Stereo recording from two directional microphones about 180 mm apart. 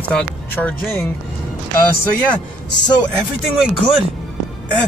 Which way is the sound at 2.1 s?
5° left (ahead or behind).